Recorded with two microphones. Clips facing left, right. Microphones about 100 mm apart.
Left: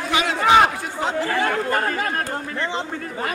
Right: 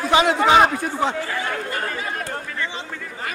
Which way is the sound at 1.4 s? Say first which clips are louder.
Left 5 dB; 55° left (ahead or behind).